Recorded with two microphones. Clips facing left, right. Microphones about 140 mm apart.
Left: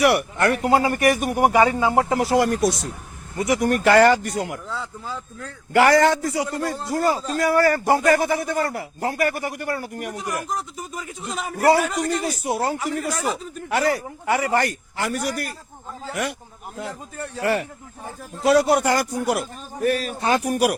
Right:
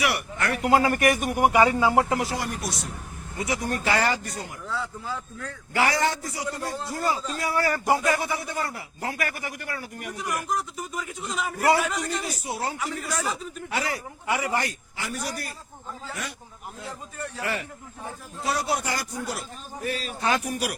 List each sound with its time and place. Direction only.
0.0 s a man's voice: 55° left (ahead or behind)
0.6 s a man's voice: 30° left (ahead or behind)
1.6 s speech: 25° left (ahead or behind)
2.3 s speech: 90° left
3.5 s a man's voice: 75° left (ahead or behind)
3.8 s a man's voice: 65° left (ahead or behind)
5.7 s a man's voice: 65° left (ahead or behind)
6.8 s speech: 45° left (ahead or behind)
8.0 s speech: 55° left (ahead or behind); by 9.3 s 40° left (ahead or behind)
9.3 s speech: 50° left (ahead or behind)
9.8 s speech: 50° left (ahead or behind)
10.2 s a man's voice: 35° left (ahead or behind); by 15.5 s 65° left (ahead or behind)
17.4 s speech: 50° left (ahead or behind)
18.7 s a man's voice: 60° left (ahead or behind)